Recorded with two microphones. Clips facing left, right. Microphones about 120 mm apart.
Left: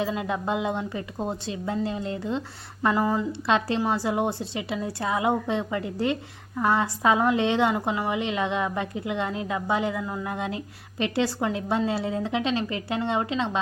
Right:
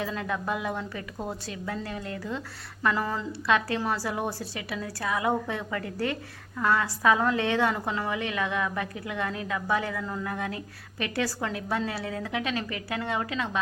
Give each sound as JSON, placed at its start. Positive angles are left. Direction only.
{"t": 0.0, "sound": "a woman's voice", "side_deg": 20}